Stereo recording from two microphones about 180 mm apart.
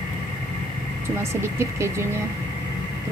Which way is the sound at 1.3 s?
15° right (ahead or behind).